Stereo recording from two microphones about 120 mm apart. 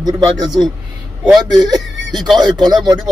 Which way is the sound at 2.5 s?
35° right (ahead or behind).